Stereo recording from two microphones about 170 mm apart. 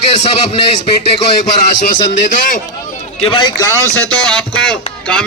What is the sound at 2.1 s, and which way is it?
Speech, 50° left (ahead or behind).